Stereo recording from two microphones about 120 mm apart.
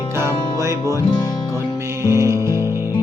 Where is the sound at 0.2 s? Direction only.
20° right (ahead or behind).